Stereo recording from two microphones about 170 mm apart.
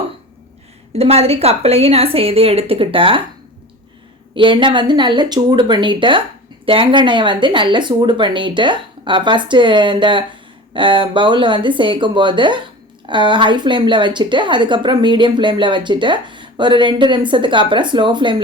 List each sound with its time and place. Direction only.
0.9 s a woman's voice: 35° right (ahead or behind)
4.4 s speech: 30° right (ahead or behind)